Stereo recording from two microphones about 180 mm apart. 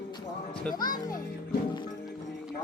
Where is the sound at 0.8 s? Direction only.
50° left (ahead or behind).